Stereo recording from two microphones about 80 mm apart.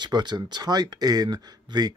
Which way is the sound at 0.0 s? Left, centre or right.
Right.